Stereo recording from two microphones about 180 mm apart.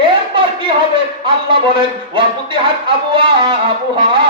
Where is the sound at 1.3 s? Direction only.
30° right (ahead or behind).